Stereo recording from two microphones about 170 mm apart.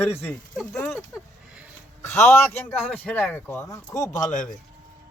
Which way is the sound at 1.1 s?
15° left (ahead or behind).